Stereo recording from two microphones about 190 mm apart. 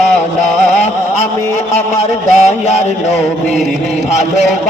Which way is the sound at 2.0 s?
35° left (ahead or behind).